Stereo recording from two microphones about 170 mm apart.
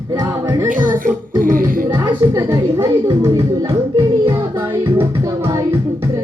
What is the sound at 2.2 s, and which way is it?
Speech, 15° right (ahead or behind).